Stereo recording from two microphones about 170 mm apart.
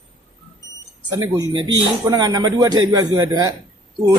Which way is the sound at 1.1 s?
25° right (ahead or behind).